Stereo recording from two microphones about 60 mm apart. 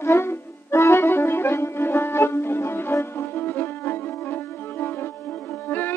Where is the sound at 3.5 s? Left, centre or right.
Left.